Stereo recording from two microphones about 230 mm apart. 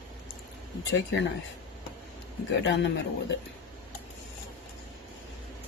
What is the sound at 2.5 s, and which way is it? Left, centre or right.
Speech, left.